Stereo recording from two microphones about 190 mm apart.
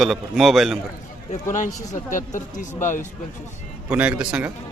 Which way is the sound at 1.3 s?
40° left (ahead or behind).